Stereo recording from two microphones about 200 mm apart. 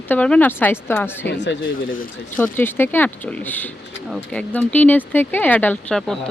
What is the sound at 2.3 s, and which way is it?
Speech, 10° left (ahead or behind).